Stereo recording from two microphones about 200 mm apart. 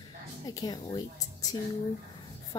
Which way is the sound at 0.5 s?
20° left (ahead or behind).